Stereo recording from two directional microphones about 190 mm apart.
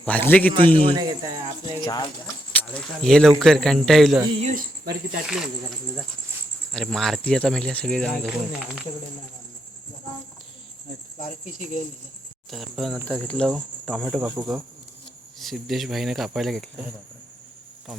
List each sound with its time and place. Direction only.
0.0 s a man's voice: 10° left (ahead or behind)
0.8 s speech: 25° right (ahead or behind)
1.8 s speech: 20° left (ahead or behind)
2.5 s speech: 5° left (ahead or behind)
4.2 s speech: 25° right (ahead or behind)
4.4 s speech: 45° right (ahead or behind)
5.2 s speech: centre (ahead or behind)
6.7 s speech: centre (ahead or behind)
11.2 s speech: 45° left (ahead or behind)
12.5 s speech: centre (ahead or behind)
15.4 s speech: centre (ahead or behind)